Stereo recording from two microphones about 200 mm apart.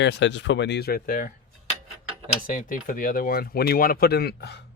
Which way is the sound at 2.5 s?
40° left (ahead or behind).